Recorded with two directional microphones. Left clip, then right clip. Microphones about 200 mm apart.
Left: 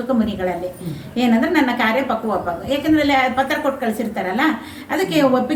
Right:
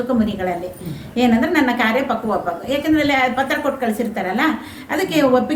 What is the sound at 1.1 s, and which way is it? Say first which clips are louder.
A woman's voice: right 1 dB; 20° right (ahead or behind).